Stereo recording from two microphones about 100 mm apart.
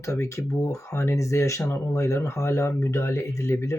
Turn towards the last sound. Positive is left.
turn(degrees=25)  # may be behind; listen again after turning